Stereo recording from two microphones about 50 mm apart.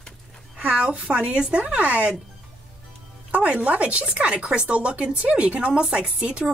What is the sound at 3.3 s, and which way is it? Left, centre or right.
Speech, right.